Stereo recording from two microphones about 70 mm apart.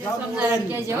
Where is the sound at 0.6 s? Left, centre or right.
Right.